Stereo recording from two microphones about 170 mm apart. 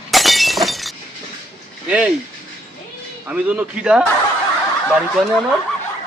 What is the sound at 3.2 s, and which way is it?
Speech, 10° right (ahead or behind).